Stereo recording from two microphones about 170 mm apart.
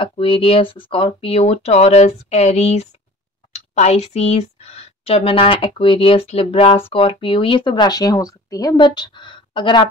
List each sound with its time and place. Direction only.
0.0 s speech: 30° left (ahead or behind)